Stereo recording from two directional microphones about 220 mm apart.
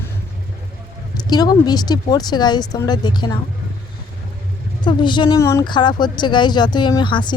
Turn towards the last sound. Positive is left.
turn(degrees=20)  # may be behind; listen again after turning